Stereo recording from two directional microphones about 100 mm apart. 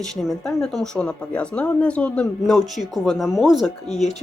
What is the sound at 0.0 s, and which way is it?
Speech, 5° left (ahead or behind).